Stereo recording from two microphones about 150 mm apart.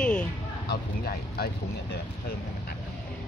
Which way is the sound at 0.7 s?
90° left.